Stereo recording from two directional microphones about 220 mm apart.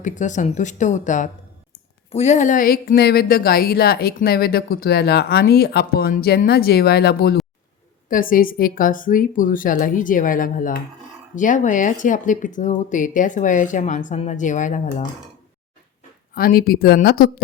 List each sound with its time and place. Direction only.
0.0 s a woman's voice: 35° left (ahead or behind)
16.3 s a woman's voice: 40° left (ahead or behind)